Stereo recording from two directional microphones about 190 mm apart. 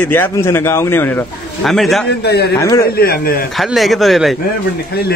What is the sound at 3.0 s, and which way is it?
Speech, 50° left (ahead or behind).